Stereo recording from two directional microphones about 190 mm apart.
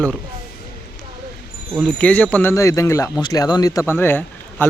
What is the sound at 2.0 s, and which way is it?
A man's voice, 10° left (ahead or behind).